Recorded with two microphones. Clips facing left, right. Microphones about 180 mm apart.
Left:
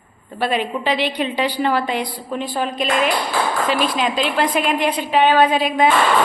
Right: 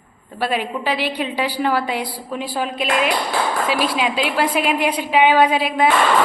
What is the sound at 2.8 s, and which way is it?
Speech, 45° left (ahead or behind).